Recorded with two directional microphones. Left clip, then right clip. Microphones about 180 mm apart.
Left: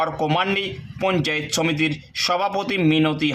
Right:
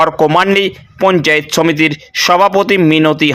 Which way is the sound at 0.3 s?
40° right (ahead or behind).